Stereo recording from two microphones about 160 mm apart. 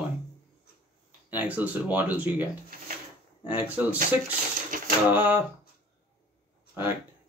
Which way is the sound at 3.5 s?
10° right (ahead or behind).